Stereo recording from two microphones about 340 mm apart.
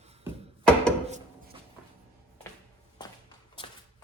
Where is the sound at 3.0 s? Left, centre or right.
Centre.